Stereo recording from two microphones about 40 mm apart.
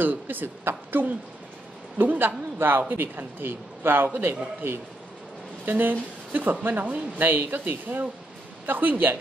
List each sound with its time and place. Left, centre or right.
0.0 s a woman's voice: right